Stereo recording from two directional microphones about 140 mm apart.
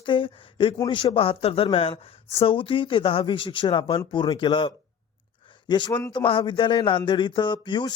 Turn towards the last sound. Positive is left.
turn(degrees=35)  # may be behind; listen again after turning